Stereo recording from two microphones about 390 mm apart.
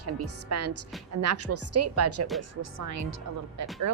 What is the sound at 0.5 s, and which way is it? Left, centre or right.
A woman's voice, right.